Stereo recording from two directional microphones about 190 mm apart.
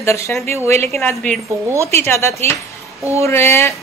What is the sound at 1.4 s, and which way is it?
Speech, 15° right (ahead or behind).